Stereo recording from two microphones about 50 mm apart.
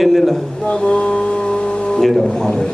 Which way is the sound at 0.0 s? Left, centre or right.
Centre.